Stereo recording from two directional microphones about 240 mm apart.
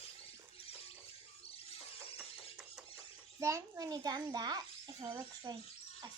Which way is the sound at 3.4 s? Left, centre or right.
Centre.